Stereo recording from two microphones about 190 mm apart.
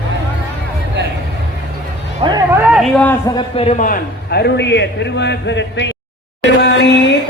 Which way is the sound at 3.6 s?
40° left (ahead or behind).